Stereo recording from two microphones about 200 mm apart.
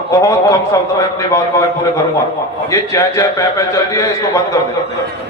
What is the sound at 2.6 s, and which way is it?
A man's voice, 15° left (ahead or behind).